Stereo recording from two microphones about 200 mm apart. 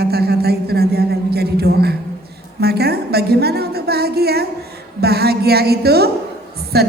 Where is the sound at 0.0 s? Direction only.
50° right (ahead or behind).